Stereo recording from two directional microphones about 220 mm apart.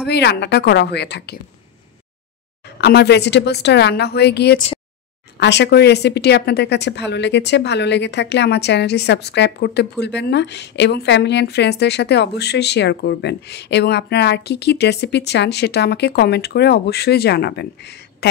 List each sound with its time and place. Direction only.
0.0 s a woman's voice: 50° left (ahead or behind)
2.8 s a woman's voice: 50° left (ahead or behind)